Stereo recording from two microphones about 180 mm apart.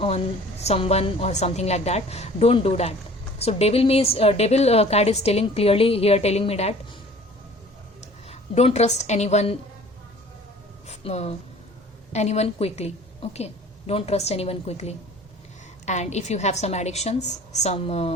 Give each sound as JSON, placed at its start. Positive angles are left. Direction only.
{"t": 0.6, "sound": "a woman's voice", "side_deg": 35}
{"t": 8.3, "sound": "a woman's voice", "side_deg": 35}
{"t": 10.8, "sound": "a woman's voice", "side_deg": 35}